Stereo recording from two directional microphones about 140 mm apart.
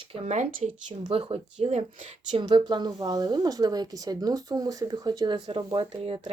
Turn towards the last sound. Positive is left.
turn(degrees=-40)  # may be behind; listen again after turning